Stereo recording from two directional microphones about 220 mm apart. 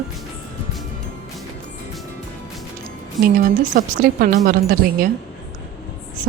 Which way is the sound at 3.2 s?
40° right (ahead or behind).